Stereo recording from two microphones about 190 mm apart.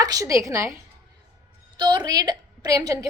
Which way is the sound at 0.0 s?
20° right (ahead or behind).